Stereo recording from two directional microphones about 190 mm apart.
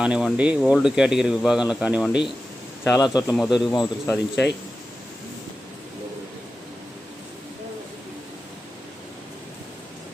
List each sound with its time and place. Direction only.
0.0 s speech: 5° right (ahead or behind)
2.8 s a man's voice: 20° left (ahead or behind)
3.3 s speech: centre (ahead or behind)
3.7 s a man's voice: 20° left (ahead or behind)